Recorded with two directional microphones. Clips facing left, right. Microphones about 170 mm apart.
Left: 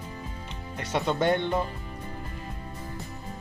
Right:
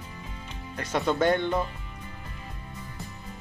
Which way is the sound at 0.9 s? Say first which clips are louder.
Right 1 dB; 20° left (ahead or behind).